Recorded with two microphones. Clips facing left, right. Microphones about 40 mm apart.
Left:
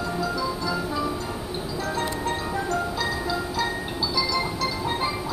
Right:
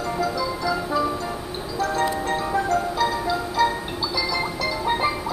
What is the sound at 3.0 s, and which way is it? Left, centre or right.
Music, centre.